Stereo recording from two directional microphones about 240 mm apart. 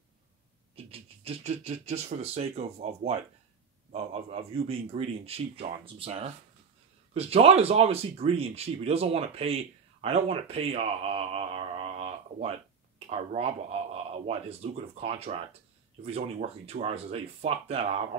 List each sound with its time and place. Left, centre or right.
0.7 s speech: right